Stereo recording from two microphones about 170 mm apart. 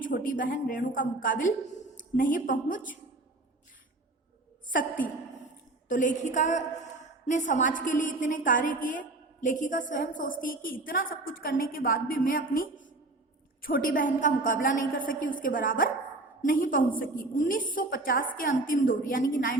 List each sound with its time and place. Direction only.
0.0 s a woman's voice: 50° left (ahead or behind)
5.9 s a woman's voice: 50° left (ahead or behind)